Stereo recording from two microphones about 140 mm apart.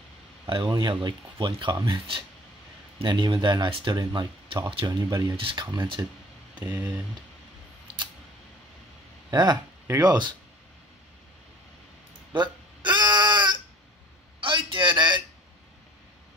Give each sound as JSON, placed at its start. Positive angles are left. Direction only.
{"t": 0.5, "sound": "speech", "side_deg": -35}
{"t": 6.6, "sound": "speech", "side_deg": -10}
{"t": 9.3, "sound": "speech", "side_deg": -30}
{"t": 9.8, "sound": "speech", "side_deg": -20}
{"t": 12.3, "sound": "a sound", "side_deg": -30}